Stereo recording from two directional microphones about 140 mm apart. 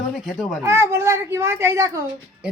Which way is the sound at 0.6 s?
20° right (ahead or behind).